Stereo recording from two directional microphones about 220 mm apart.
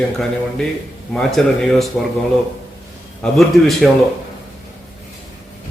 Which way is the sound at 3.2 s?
Centre (ahead or behind).